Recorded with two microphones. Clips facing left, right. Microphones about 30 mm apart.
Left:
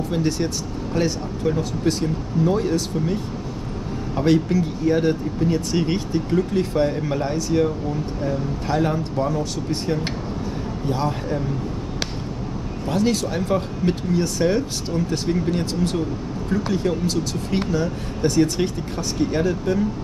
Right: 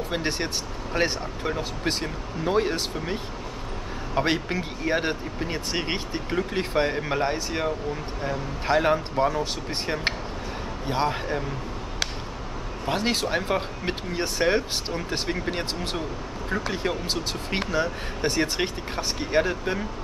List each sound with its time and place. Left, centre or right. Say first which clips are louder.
0.1 s speech: left 5 dB; right
12.8 s speech: left 4 dB; right